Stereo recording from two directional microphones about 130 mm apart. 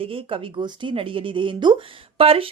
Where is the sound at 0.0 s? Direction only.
45° right (ahead or behind).